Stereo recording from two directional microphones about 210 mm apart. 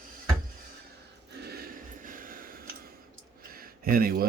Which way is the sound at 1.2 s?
50° right (ahead or behind).